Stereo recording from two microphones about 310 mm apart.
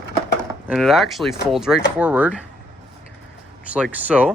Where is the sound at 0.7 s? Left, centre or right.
Centre.